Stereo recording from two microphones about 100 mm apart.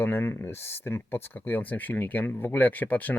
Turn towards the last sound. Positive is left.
turn(degrees=15)  # may be behind; listen again after turning